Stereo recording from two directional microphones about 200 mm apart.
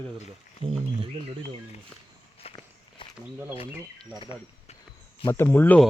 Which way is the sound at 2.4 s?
30° left (ahead or behind).